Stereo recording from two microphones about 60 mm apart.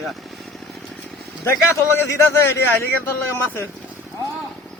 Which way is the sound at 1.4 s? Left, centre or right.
Left.